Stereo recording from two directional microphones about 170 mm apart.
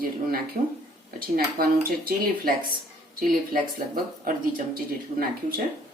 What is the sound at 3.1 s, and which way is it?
Speech, 60° right (ahead or behind).